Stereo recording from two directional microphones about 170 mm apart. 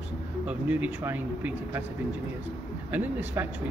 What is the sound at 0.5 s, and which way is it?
A man's voice, 10° right (ahead or behind).